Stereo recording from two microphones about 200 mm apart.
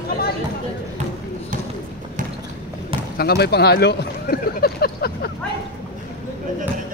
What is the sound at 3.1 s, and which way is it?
Speech, 50° left (ahead or behind).